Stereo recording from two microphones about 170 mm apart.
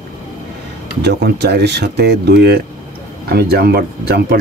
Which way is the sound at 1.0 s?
75° right (ahead or behind).